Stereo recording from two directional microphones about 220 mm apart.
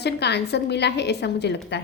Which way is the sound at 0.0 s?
50° left (ahead or behind).